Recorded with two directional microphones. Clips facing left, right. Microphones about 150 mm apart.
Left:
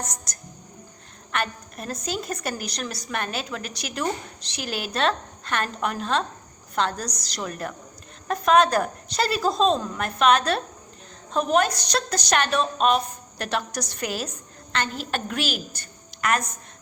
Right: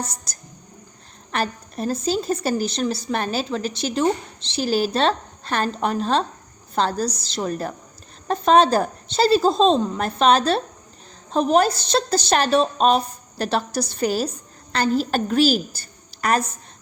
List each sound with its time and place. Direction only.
0.0 s a woman's voice: 30° right (ahead or behind)